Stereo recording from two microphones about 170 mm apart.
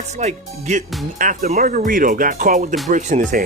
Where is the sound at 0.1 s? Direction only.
45° right (ahead or behind).